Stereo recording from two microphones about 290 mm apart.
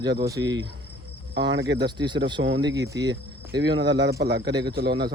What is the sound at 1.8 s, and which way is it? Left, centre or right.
Speech, centre.